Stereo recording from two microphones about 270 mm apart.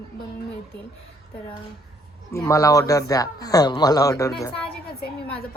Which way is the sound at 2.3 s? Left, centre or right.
Centre.